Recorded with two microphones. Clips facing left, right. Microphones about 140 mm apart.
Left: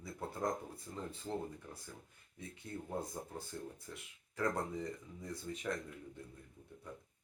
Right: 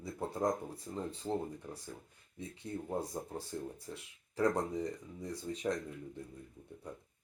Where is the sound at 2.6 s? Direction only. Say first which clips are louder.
Right 5 dB; 20° right (ahead or behind).